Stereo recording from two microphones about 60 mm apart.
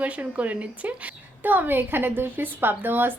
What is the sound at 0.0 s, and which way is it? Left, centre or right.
A woman's voice, right.